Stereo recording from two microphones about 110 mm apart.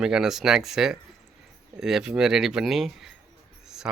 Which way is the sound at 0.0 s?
5° right (ahead or behind).